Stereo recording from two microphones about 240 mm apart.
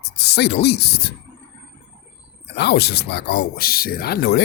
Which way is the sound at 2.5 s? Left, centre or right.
Left.